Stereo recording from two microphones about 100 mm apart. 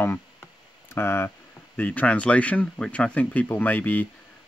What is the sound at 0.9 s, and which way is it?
Speech, 25° left (ahead or behind).